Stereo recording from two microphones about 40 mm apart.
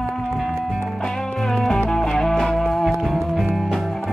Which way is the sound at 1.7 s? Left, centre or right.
Centre.